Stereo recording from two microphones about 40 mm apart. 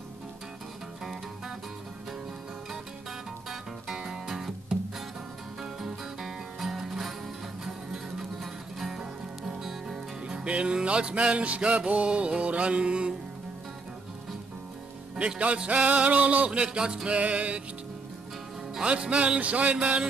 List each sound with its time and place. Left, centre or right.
3.4 s music: centre
10.2 s music: right
15.1 s music: right
16.4 s music: right
17.2 s music: right
18.8 s music: right